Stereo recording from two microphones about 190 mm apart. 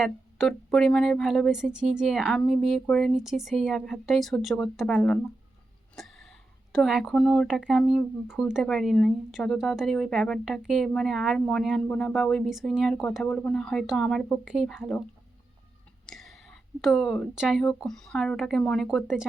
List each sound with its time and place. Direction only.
0.0 s speech: centre (ahead or behind)
6.0 s a sound: centre (ahead or behind)
6.7 s speech: centre (ahead or behind)
16.0 s speech: centre (ahead or behind)